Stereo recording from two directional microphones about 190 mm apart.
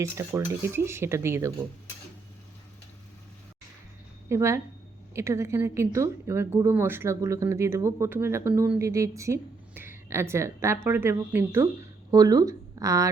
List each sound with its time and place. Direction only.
0.0 s a woman's voice: 15° right (ahead or behind)
4.3 s a woman's voice: 15° right (ahead or behind)